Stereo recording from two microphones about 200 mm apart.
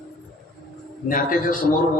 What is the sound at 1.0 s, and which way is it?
Speech, 45° left (ahead or behind).